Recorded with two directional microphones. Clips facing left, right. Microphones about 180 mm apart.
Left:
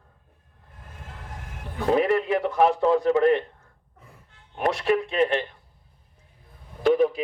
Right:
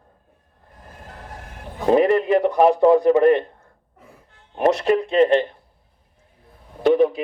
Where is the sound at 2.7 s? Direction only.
60° right (ahead or behind).